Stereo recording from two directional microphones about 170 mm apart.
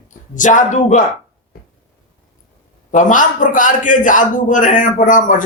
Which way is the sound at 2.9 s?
50° left (ahead or behind).